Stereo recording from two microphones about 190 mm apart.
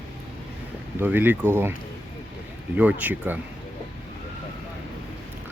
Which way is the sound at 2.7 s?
5° right (ahead or behind).